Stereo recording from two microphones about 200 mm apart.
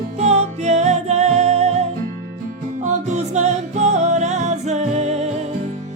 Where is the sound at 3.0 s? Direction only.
35° right (ahead or behind).